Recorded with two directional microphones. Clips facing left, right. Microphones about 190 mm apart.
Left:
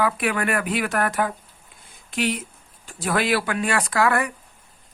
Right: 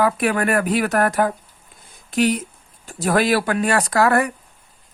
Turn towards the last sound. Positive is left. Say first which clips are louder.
# right 4 dB
turn(degrees=-40)  # may be behind; listen again after turning